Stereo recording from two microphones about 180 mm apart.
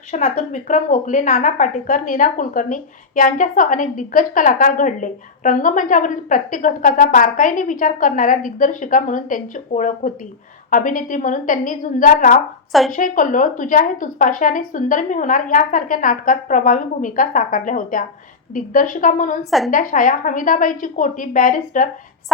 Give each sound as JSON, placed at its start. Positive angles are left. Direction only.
{"t": 0.1, "sound": "a woman's voice", "side_deg": 40}
{"t": 19.5, "sound": "a woman's voice", "side_deg": 0}
{"t": 19.7, "sound": "a woman's voice", "side_deg": 50}